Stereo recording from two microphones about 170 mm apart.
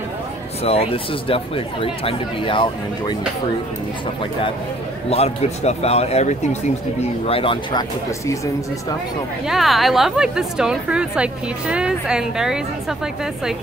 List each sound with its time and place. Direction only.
0.7 s speech: 35° left (ahead or behind)
5.1 s speech: 40° left (ahead or behind)
9.5 s a woman's voice: centre (ahead or behind)